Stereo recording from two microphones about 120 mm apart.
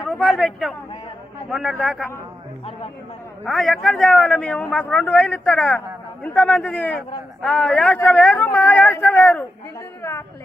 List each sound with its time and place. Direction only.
0.1 s a man's voice: centre (ahead or behind)
3.4 s a man's voice: centre (ahead or behind)
10.0 s a woman's voice: 20° left (ahead or behind)